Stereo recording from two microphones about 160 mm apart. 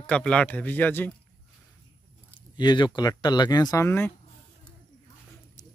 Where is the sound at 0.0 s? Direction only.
5° left (ahead or behind).